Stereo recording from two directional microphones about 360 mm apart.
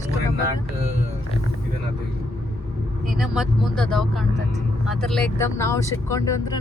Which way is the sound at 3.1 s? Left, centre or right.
Centre.